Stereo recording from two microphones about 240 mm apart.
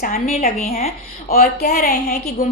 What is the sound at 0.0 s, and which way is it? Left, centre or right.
A woman's voice, left.